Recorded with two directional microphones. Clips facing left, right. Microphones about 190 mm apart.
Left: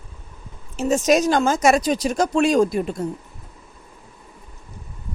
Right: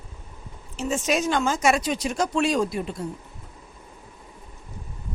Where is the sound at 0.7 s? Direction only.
45° left (ahead or behind).